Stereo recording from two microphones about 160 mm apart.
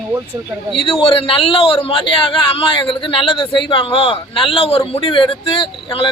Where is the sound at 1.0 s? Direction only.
35° left (ahead or behind).